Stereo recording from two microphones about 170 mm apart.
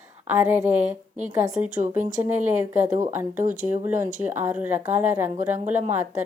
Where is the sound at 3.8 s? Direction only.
15° right (ahead or behind).